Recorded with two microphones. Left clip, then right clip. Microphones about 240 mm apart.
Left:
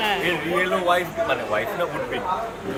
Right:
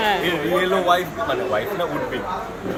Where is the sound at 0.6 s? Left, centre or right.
Centre.